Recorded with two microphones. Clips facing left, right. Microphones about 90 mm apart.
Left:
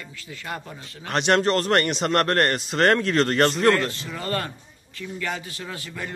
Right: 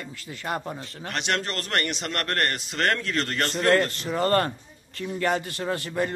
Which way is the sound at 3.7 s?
40° right (ahead or behind).